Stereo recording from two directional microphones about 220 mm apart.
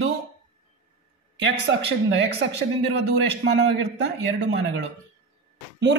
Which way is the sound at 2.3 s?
50° right (ahead or behind).